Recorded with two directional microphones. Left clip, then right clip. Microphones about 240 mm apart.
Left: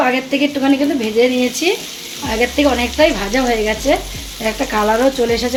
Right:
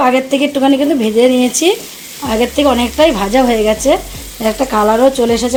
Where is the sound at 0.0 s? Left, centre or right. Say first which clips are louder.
Right 4 dB; right.